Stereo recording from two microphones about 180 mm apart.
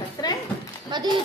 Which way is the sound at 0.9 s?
25° right (ahead or behind).